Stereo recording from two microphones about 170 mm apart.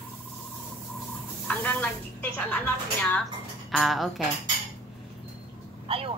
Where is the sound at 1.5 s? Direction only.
10° left (ahead or behind).